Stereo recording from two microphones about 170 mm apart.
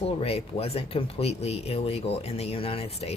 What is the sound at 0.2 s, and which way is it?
Speech, 35° left (ahead or behind).